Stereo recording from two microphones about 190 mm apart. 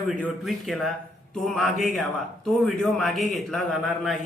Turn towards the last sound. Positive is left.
turn(degrees=0)  # may be behind; listen again after turning